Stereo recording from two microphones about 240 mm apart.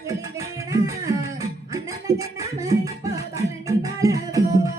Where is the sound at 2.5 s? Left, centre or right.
Centre.